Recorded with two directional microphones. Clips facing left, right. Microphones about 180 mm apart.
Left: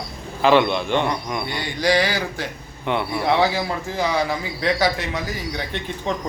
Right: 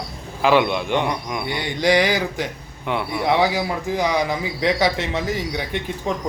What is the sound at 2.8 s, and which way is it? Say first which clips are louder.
Speech: left 1 dB; 5° right (ahead or behind).